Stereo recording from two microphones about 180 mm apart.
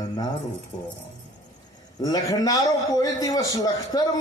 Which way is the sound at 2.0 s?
20° left (ahead or behind).